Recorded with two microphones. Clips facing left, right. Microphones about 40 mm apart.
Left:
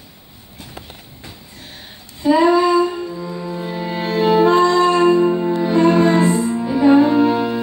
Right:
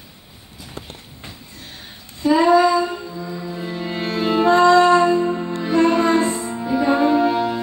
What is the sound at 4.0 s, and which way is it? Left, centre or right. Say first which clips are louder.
Music: left 5 dB; left.